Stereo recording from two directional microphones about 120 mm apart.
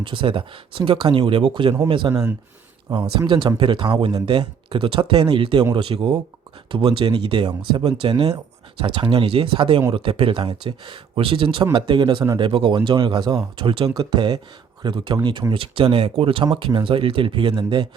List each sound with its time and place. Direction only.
0.0 s speech: 45° right (ahead or behind)